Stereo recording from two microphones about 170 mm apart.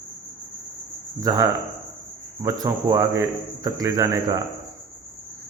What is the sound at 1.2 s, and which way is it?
A man's voice, 20° right (ahead or behind).